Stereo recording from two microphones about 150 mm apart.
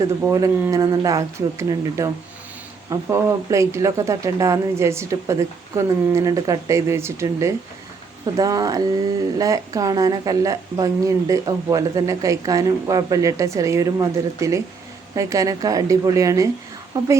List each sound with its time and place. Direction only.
0.2 s speech: 20° right (ahead or behind)